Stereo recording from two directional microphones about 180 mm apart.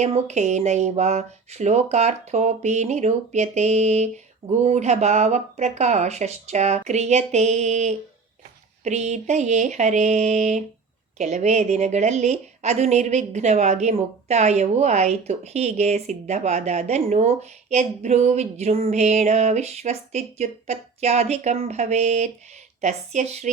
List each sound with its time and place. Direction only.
0.0 s a woman's voice: 40° right (ahead or behind)